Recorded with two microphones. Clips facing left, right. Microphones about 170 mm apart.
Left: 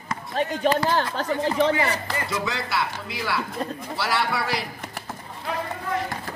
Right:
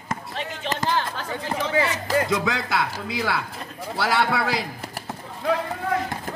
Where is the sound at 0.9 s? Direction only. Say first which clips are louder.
Left 2 dB; 45° left (ahead or behind).